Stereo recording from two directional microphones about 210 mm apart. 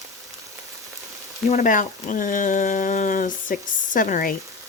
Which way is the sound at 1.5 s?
40° left (ahead or behind).